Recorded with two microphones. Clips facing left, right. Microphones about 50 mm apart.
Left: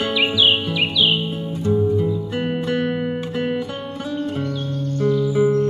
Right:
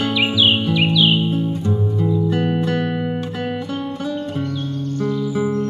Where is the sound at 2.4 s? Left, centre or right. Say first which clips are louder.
Right 2 dB; centre.